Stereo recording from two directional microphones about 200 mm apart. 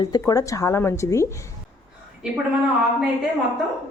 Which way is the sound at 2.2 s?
5° right (ahead or behind).